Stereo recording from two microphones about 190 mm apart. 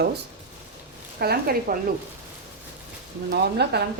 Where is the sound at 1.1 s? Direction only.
55° right (ahead or behind).